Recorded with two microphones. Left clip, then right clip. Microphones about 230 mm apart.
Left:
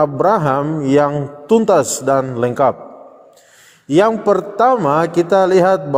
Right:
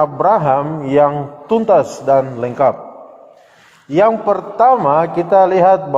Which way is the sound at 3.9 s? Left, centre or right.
Left.